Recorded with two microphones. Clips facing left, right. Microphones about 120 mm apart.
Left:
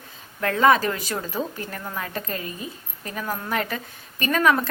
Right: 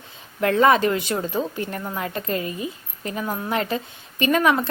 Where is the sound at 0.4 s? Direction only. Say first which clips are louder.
Right 2 dB; 30° right (ahead or behind).